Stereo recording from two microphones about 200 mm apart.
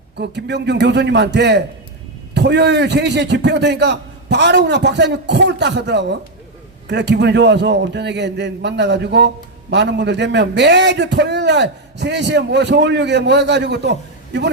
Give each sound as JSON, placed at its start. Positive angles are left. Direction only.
{"t": 0.2, "sound": "a man's voice", "side_deg": -60}